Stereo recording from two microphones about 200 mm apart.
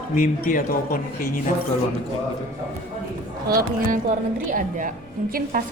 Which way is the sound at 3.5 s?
50° right (ahead or behind).